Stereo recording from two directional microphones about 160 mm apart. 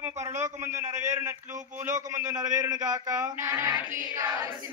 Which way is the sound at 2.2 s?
20° right (ahead or behind).